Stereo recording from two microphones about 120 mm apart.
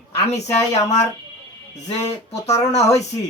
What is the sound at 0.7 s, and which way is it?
Speech, 70° left (ahead or behind).